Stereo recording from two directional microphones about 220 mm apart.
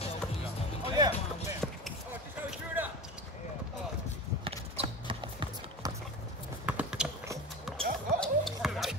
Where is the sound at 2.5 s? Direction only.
10° right (ahead or behind).